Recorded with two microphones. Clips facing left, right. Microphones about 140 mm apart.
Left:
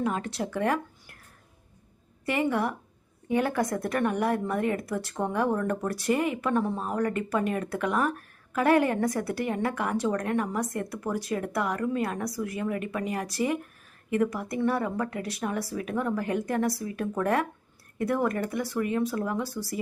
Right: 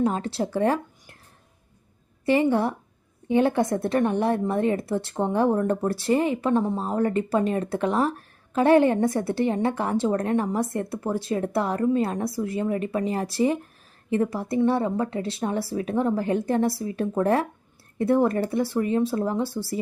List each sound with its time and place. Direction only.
0.0 s speech: 30° right (ahead or behind)
2.2 s speech: 30° right (ahead or behind)